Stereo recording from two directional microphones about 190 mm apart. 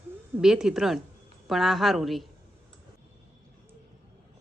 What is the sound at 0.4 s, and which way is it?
A woman's voice, centre (ahead or behind).